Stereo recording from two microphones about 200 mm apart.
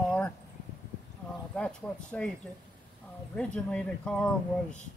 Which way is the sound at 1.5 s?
5° left (ahead or behind).